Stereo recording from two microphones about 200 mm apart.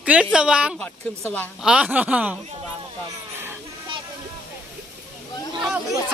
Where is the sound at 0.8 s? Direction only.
10° left (ahead or behind).